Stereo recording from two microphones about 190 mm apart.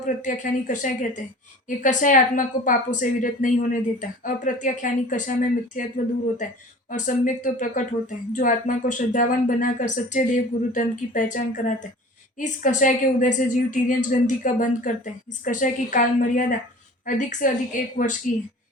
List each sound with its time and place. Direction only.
0.0 s a woman's voice: 40° left (ahead or behind)
6.9 s a woman's voice: 40° left (ahead or behind)